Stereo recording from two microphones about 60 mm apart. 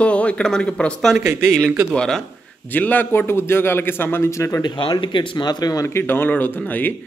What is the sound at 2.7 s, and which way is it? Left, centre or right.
A man's voice, left.